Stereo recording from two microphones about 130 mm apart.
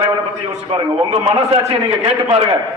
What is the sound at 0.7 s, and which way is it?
A man's voice, 45° right (ahead or behind).